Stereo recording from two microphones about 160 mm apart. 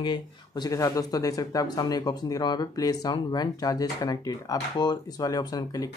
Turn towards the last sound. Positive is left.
turn(degrees=25)  # may be behind; listen again after turning